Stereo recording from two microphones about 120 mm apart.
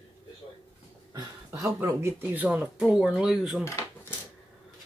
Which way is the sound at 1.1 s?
30° right (ahead or behind).